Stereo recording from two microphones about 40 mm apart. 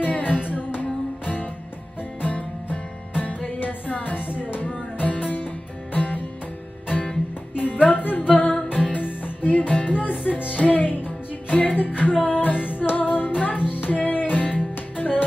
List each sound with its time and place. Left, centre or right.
0.0 s music: left
7.5 s music: left
8.9 s music: left